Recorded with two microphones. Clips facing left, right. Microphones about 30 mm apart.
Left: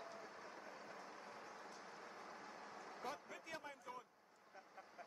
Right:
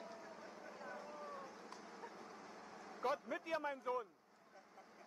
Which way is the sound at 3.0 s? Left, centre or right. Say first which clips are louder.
Right 11 dB; right.